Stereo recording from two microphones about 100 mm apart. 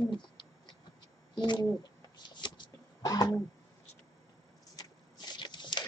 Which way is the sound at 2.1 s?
50° left (ahead or behind).